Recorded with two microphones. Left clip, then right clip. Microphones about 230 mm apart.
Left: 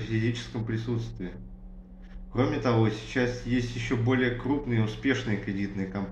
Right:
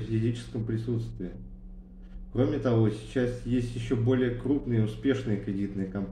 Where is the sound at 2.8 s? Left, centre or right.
Centre.